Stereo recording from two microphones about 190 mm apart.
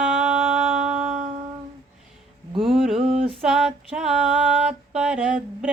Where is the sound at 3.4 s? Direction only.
5° right (ahead or behind).